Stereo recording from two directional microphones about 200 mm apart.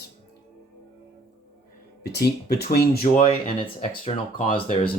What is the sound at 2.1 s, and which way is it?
Speech, 55° left (ahead or behind).